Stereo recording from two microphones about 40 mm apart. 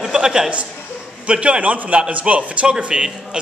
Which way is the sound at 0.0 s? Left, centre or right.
Centre.